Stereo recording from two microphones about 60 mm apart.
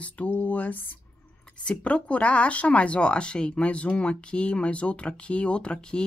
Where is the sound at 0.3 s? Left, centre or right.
Left.